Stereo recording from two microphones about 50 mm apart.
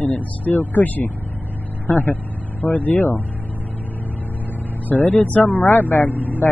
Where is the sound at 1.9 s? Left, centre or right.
Left.